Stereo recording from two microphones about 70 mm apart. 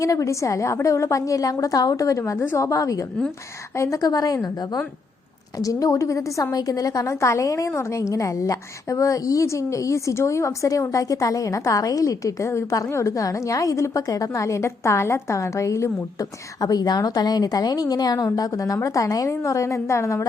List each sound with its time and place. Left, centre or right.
0.0 s a woman's voice: left
5.5 s a woman's voice: left